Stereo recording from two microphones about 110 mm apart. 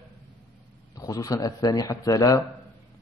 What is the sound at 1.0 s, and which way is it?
A man's voice, 35° left (ahead or behind).